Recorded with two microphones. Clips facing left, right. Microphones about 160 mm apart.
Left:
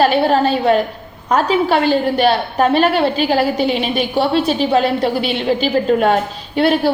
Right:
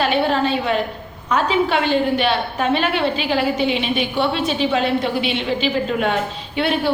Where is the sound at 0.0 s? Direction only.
40° left (ahead or behind).